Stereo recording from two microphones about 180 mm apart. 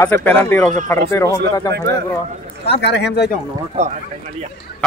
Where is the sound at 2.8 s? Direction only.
70° left (ahead or behind).